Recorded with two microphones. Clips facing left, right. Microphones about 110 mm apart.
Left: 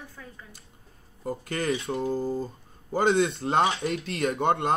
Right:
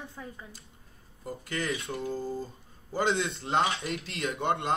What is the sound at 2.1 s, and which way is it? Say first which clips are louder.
Speech: left 4 dB; 50° left (ahead or behind).